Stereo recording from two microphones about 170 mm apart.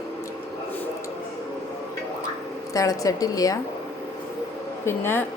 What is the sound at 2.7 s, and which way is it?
Speech, 20° left (ahead or behind).